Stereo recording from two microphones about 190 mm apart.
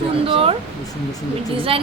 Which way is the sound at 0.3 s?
30° right (ahead or behind).